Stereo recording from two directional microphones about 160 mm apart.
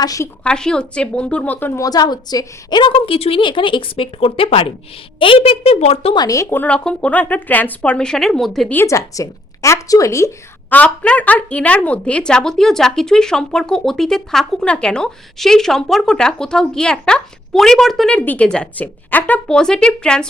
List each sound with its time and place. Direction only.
0.0 s a woman's voice: 20° left (ahead or behind)
0.4 s a woman's voice: 5° left (ahead or behind); by 6.1 s 40° left (ahead or behind)
6.1 s speech: 20° left (ahead or behind); by 8.7 s centre (ahead or behind)
8.7 s a woman's voice: 15° left (ahead or behind)